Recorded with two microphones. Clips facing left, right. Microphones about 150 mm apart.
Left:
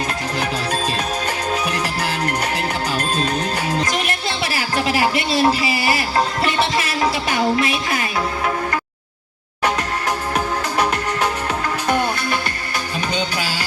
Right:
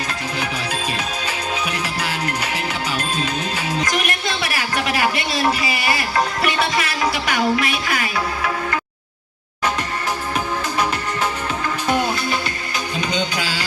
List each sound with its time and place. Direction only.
3.8 s speech: 25° left (ahead or behind)
13.4 s music: 45° left (ahead or behind)